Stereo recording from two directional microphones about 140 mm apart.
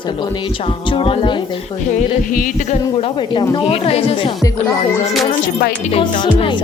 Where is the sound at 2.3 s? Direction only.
80° left.